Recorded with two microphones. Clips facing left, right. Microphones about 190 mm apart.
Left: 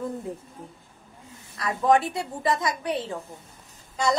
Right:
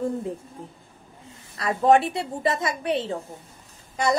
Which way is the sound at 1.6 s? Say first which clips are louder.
Right 3 dB; 25° right (ahead or behind).